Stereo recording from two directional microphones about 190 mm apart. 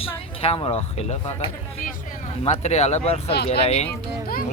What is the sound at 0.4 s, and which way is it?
Speech, 30° left (ahead or behind).